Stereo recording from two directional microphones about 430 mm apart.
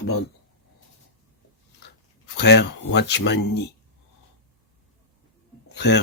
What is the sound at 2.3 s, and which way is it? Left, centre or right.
Speech, left.